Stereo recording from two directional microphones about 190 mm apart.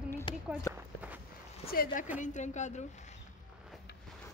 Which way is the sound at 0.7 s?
15° left (ahead or behind).